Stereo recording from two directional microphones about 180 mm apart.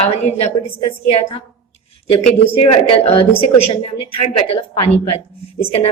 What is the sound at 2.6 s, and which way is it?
A woman's voice, 30° left (ahead or behind).